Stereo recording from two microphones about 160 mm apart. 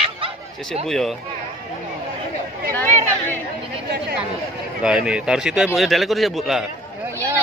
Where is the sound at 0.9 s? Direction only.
Centre (ahead or behind).